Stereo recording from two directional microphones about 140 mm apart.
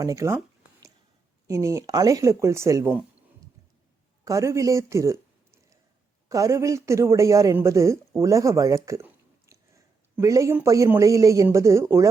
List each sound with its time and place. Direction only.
0.0 s a sound: 20° right (ahead or behind)
1.5 s speech: 20° right (ahead or behind)
4.2 s a man's voice: 20° right (ahead or behind)